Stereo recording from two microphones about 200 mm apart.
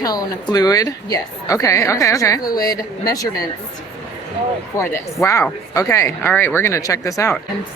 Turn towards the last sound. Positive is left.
turn(degrees=15)  # may be behind; listen again after turning